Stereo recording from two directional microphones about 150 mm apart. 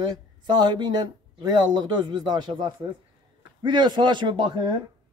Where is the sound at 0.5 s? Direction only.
30° right (ahead or behind).